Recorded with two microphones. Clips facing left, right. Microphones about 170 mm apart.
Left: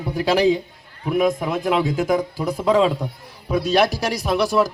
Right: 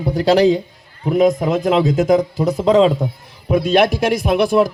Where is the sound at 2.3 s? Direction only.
20° right (ahead or behind).